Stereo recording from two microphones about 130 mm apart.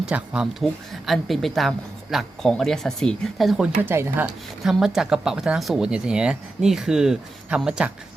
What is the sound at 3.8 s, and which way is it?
Speech, 15° right (ahead or behind).